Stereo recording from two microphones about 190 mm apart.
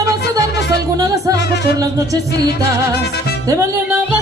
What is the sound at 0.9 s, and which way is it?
Music, 20° right (ahead or behind).